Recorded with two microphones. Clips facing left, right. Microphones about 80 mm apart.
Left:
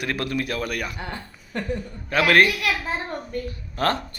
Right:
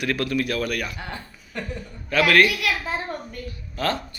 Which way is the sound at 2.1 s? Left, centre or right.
Left.